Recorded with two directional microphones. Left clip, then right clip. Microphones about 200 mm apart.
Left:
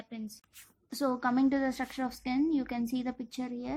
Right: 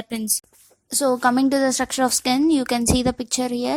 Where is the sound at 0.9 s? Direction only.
30° right (ahead or behind).